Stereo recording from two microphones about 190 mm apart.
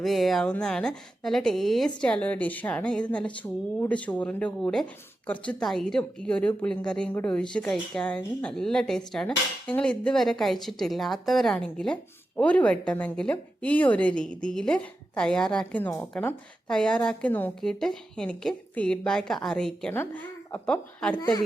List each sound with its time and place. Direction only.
0.0 s a woman's voice: centre (ahead or behind)